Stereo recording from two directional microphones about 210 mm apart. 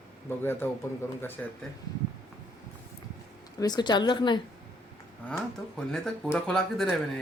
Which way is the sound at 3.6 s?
20° left (ahead or behind).